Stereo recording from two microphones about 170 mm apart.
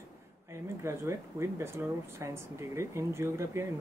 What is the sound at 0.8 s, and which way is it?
Speech, 15° right (ahead or behind).